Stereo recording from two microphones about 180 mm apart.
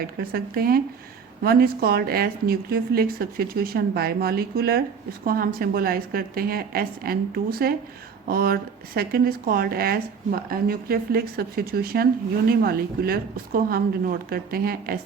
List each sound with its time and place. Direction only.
0.0 s speech: 55° right (ahead or behind)